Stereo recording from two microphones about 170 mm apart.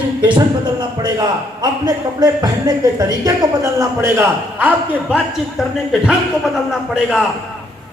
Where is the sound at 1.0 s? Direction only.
25° right (ahead or behind); by 7.2 s 5° right (ahead or behind).